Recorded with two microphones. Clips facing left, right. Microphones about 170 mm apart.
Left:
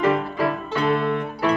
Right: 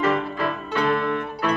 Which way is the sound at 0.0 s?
15° left (ahead or behind).